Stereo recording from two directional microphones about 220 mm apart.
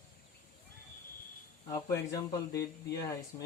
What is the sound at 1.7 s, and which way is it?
Speech, 15° left (ahead or behind).